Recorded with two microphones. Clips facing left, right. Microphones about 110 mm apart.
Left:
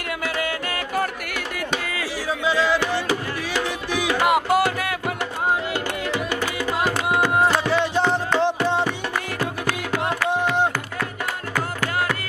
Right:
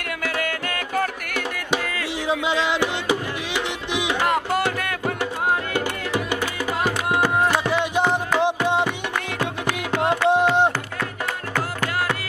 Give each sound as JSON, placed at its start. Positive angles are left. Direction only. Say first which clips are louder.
{"t": 0.4, "sound": "music", "louder": "even", "side_deg": 5}
{"t": 2.2, "sound": "music", "louder": "left 1 dB", "side_deg": -20}
{"t": 4.2, "sound": "music", "louder": "left 4 dB", "side_deg": 10}
{"t": 6.1, "sound": "music", "louder": "right 3 dB", "side_deg": -15}
{"t": 10.2, "sound": "a sound", "louder": "right 4 dB", "side_deg": -20}